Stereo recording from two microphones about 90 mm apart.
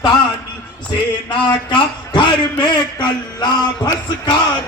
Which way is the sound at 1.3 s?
60° left (ahead or behind).